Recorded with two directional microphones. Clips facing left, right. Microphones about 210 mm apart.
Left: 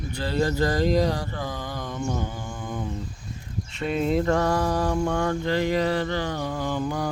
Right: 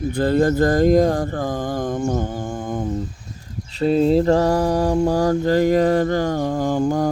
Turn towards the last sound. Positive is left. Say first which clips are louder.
# right 8 dB
turn(degrees=-45)  # may be behind; listen again after turning